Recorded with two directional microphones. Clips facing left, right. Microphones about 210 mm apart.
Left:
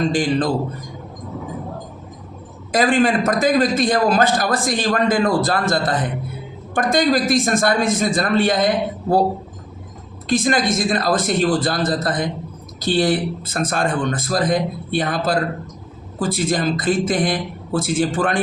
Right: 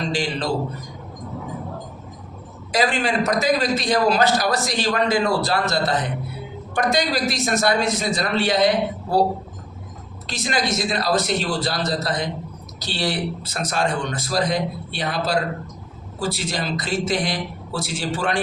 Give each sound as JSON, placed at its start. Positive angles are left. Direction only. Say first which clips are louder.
{"t": 0.0, "sound": "a man's voice", "louder": "left 6 dB", "side_deg": 50}
{"t": 2.7, "sound": "a man's voice", "louder": "left 5 dB", "side_deg": 50}
{"t": 10.2, "sound": "a man's voice", "louder": "left 6 dB", "side_deg": 50}